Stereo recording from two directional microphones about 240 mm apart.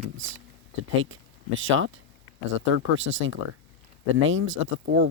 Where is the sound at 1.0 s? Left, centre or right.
Right.